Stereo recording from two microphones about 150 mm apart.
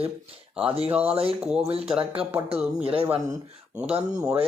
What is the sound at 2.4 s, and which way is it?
Speech, 40° right (ahead or behind).